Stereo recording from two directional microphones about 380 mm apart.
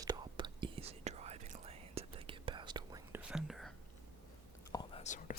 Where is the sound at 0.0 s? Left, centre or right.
Centre.